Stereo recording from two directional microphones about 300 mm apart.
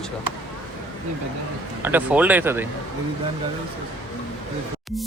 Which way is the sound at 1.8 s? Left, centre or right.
Centre.